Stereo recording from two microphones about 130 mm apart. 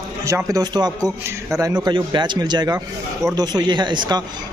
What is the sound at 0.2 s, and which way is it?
A man's voice, 25° right (ahead or behind).